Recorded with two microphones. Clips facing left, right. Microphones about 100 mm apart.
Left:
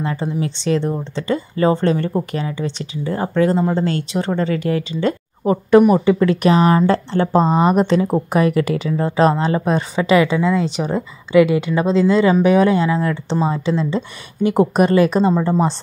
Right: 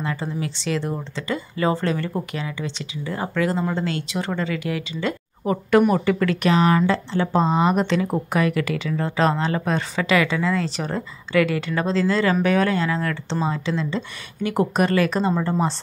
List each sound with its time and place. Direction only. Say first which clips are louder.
0.0 s speech: left 5 dB; 30° left (ahead or behind)
5.0 s a sound: left 5 dB; 35° left (ahead or behind)
5.8 s speech: left 6 dB; 15° left (ahead or behind); by 6.9 s 35° left (ahead or behind)
6.9 s a woman's voice: left 5 dB; 45° left (ahead or behind); by 13.2 s 15° left (ahead or behind)
13.8 s speech: left 5 dB; 35° left (ahead or behind)